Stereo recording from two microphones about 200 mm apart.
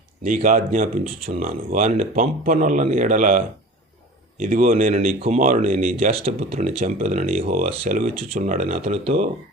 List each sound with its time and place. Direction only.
0.3 s speech: 40° right (ahead or behind)
6.1 s speech: 30° right (ahead or behind)